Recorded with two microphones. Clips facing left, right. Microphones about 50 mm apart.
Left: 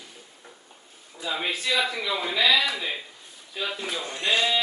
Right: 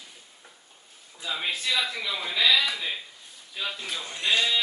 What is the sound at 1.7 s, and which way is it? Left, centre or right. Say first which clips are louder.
A man's voice: left 4 dB; centre.